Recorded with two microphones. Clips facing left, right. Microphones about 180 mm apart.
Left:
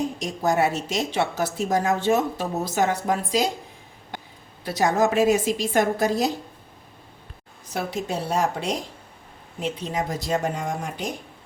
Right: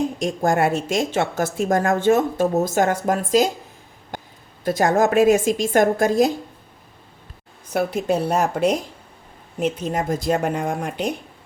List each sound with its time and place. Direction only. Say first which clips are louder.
0.2 s a woman's voice: right 2 dB; 50° right (ahead or behind)
4.6 s a woman's voice: right 3 dB; 50° right (ahead or behind)
7.7 s a woman's voice: right 7 dB; 55° right (ahead or behind)